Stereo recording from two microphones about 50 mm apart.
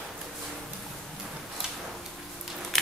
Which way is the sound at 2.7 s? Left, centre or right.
Centre.